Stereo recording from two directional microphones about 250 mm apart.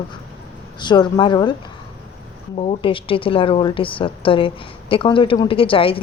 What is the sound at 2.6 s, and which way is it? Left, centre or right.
A woman's voice, left.